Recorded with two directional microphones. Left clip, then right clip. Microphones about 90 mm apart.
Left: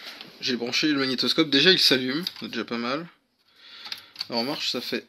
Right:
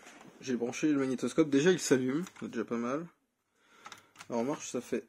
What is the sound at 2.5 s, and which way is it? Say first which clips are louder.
Speech: left 5 dB; 5° right (ahead or behind).